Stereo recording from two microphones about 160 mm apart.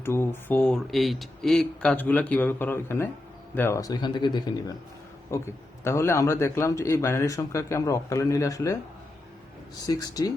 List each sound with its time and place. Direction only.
0.0 s speech: 15° left (ahead or behind)
9.8 s speech: 25° left (ahead or behind)